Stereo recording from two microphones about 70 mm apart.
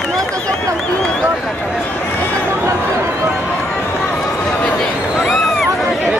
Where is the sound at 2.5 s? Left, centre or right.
Right.